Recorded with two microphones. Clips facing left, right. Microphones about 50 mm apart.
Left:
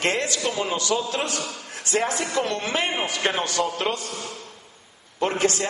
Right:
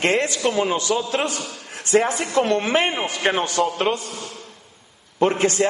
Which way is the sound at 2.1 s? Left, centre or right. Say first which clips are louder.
Right 4 dB; centre.